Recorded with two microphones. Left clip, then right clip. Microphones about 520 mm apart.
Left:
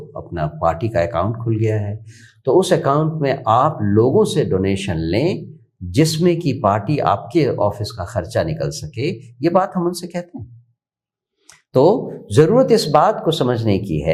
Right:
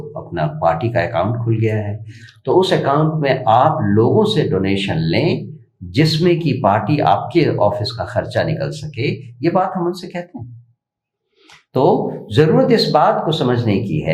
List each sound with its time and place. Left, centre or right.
0.3 s speech: left
11.7 s speech: left